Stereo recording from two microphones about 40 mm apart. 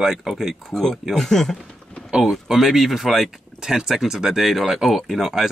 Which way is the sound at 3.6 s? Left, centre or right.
Centre.